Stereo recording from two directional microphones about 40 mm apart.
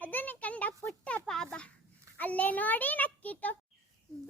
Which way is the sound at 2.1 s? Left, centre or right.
Left.